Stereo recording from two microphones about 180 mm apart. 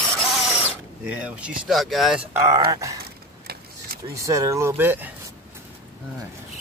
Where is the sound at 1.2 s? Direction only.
5° right (ahead or behind).